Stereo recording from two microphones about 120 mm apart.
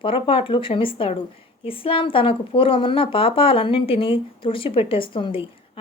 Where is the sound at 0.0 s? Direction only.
50° left (ahead or behind).